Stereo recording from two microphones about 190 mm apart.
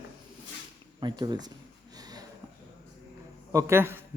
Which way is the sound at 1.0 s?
25° right (ahead or behind).